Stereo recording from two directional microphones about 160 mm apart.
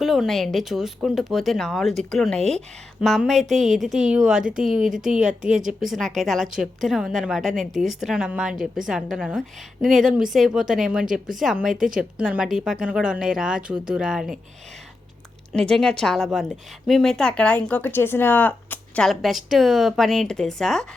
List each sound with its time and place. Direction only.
0.0 s a woman's voice: centre (ahead or behind)
5.3 s a woman's voice: 55° right (ahead or behind)
5.6 s a woman's voice: centre (ahead or behind)
11.7 s speech: 55° right (ahead or behind)
11.9 s a woman's voice: 5° right (ahead or behind)
15.5 s a woman's voice: 5° left (ahead or behind)